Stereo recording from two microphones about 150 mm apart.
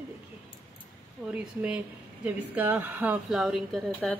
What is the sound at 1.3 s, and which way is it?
A woman's voice, 10° right (ahead or behind).